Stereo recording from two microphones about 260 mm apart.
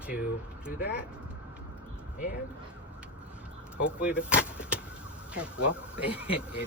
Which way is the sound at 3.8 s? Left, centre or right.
Centre.